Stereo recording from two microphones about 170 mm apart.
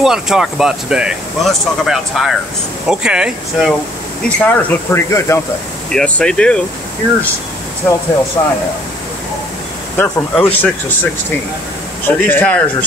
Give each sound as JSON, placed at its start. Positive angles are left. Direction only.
{"t": 0.0, "sound": "speech", "side_deg": 0}
{"t": 4.4, "sound": "speech", "side_deg": 10}
{"t": 7.8, "sound": "speech", "side_deg": 10}
{"t": 9.9, "sound": "speech", "side_deg": 10}
{"t": 12.2, "sound": "speech", "side_deg": 10}